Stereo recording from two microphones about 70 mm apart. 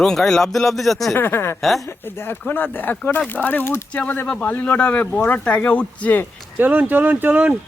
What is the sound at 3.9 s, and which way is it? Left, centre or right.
Speech, centre.